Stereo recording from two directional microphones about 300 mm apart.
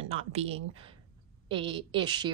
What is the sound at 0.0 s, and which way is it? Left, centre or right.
Speech, centre.